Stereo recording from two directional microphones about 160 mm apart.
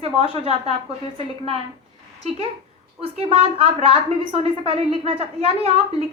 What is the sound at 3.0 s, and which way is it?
A woman's voice, 35° right (ahead or behind).